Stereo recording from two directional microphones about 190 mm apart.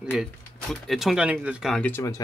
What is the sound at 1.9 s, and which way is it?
Speech, 15° left (ahead or behind).